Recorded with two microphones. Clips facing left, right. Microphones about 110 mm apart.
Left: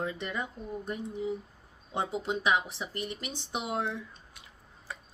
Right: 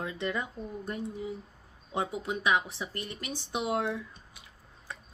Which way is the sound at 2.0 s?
25° left (ahead or behind).